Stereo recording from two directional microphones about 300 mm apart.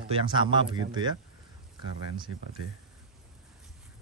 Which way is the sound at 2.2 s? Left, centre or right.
Right.